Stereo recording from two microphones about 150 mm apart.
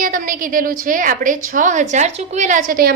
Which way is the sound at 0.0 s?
65° right (ahead or behind).